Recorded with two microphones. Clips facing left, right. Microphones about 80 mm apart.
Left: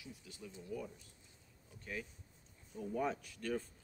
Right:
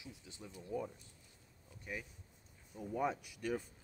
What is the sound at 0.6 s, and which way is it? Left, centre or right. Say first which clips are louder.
Speech: right 4 dB; right.